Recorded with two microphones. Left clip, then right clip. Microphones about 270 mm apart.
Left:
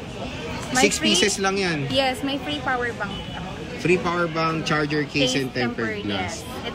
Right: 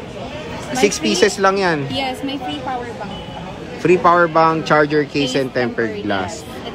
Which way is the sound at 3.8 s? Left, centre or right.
Centre.